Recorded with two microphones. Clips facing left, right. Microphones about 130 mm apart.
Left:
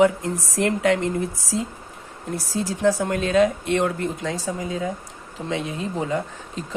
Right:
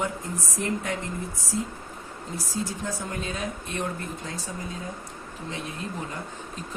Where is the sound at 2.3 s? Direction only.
75° left (ahead or behind).